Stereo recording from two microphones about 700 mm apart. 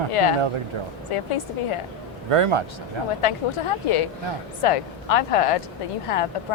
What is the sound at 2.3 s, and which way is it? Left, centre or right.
Speech, right.